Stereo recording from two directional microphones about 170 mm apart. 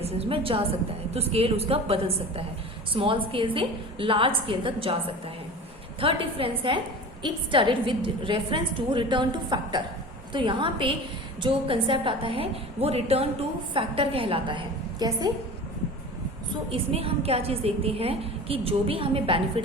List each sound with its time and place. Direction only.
0.0 s a woman's voice: 35° right (ahead or behind)
16.5 s a woman's voice: 35° right (ahead or behind)